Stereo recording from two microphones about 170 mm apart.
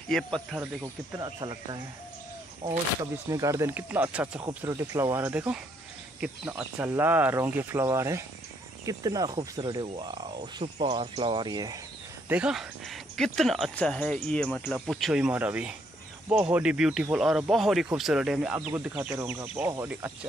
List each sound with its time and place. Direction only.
0.1 s speech: 5° left (ahead or behind)
1.1 s speech: 25° right (ahead or behind)
3.3 s speech: 20° right (ahead or behind)
10.6 s speech: 40° right (ahead or behind)
11.0 s speech: 30° right (ahead or behind)
12.3 s speech: 5° right (ahead or behind)